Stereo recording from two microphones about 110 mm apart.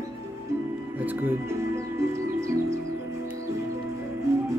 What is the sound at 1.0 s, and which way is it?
Music, 15° right (ahead or behind).